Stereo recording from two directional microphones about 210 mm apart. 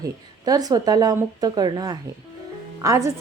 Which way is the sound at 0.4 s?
15° right (ahead or behind).